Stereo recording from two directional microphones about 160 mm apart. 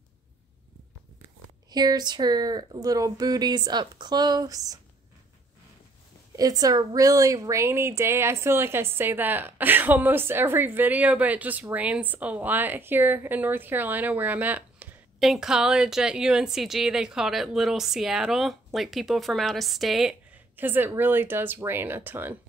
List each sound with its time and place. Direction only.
1.7 s speech: 25° right (ahead or behind)
6.3 s a woman's voice: 25° right (ahead or behind)